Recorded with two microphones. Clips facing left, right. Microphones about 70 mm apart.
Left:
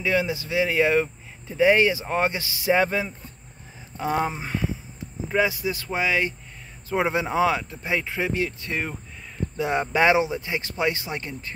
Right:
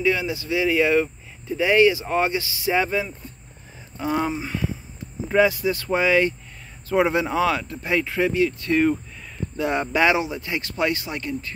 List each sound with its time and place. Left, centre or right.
0.0 s speech: left
5.3 s speech: centre
6.9 s speech: centre
8.3 s speech: left
8.5 s speech: centre